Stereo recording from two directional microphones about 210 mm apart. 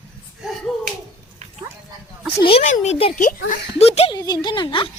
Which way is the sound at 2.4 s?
30° left (ahead or behind).